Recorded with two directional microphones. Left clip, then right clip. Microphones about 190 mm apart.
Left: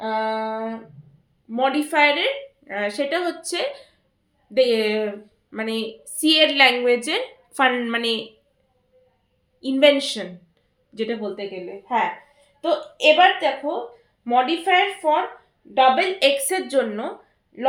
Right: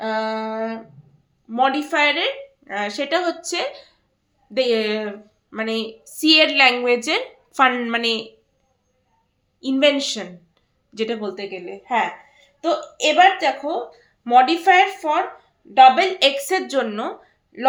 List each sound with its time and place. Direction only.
0.0 s a sound: 35° right (ahead or behind)
1.5 s a woman's voice: 25° right (ahead or behind)
9.6 s a woman's voice: 20° right (ahead or behind)
12.6 s a woman's voice: 30° right (ahead or behind)
17.5 s a man's voice: 40° right (ahead or behind)